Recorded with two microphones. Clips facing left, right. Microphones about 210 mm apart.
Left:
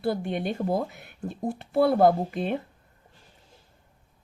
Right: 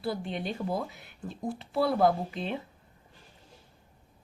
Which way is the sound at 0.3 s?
50° left (ahead or behind).